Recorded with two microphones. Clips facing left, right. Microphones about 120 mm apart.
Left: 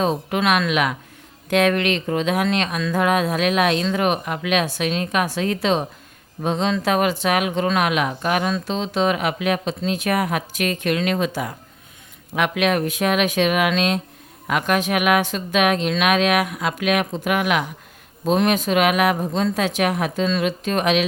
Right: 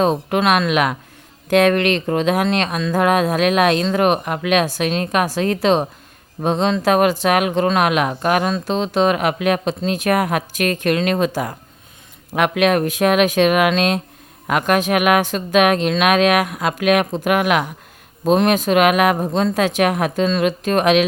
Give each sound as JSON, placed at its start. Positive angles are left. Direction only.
{"t": 0.0, "sound": "speech", "side_deg": -50}